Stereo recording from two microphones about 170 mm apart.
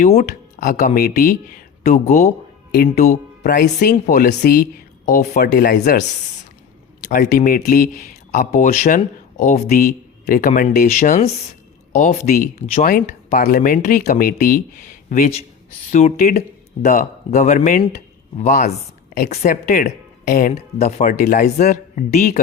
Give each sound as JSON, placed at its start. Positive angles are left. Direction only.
{"t": 0.2, "sound": "speech", "side_deg": 55}
{"t": 1.8, "sound": "speech", "side_deg": 45}
{"t": 2.7, "sound": "speech", "side_deg": 60}
{"t": 5.5, "sound": "speech", "side_deg": 70}
{"t": 7.0, "sound": "speech", "side_deg": 60}
{"t": 9.8, "sound": "speech", "side_deg": 55}
{"t": 15.1, "sound": "a woman's voice", "side_deg": 45}